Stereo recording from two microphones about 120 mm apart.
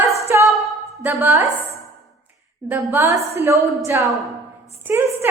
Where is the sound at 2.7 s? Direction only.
20° right (ahead or behind).